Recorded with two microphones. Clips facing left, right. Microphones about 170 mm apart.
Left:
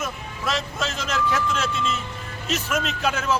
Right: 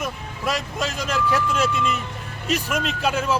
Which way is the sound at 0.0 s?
10° right (ahead or behind).